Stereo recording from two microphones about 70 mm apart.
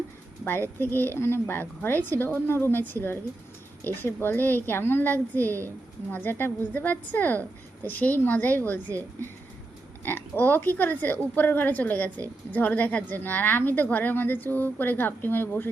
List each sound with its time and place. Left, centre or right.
0.8 s a woman's voice: left